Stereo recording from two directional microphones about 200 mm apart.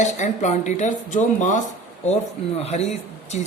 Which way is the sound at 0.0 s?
35° left (ahead or behind).